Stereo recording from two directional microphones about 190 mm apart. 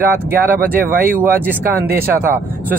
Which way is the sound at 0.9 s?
50° right (ahead or behind).